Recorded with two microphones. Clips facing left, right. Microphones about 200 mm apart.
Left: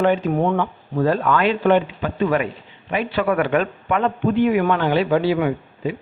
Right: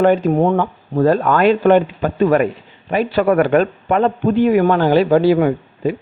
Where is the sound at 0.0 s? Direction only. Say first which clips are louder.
Right 5 dB; 40° right (ahead or behind).